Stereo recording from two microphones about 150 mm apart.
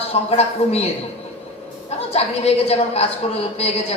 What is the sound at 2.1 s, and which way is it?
A man's voice, 45° left (ahead or behind).